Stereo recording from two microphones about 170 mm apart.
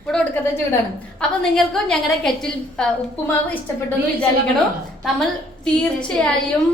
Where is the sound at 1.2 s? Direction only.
5° left (ahead or behind).